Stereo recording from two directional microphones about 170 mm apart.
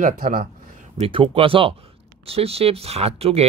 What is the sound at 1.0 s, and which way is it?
Speech, 30° right (ahead or behind).